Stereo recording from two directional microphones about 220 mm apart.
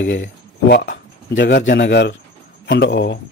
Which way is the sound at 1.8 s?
50° left (ahead or behind).